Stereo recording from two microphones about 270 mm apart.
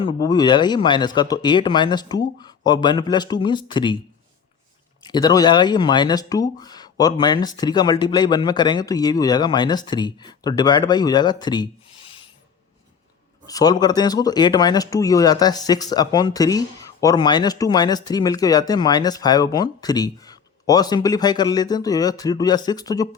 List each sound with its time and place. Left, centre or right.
0.0 s speech: centre
5.0 s speech: centre
13.5 s speech: centre